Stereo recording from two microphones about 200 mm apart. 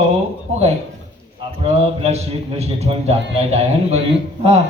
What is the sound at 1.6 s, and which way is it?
Speech, 30° right (ahead or behind).